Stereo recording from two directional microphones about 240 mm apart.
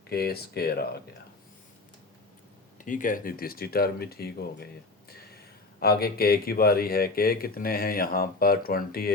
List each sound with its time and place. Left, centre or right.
0.1 s speech: left
2.7 s speech: left